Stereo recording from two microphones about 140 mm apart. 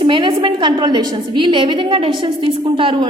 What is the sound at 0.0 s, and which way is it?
A woman's voice, 35° right (ahead or behind).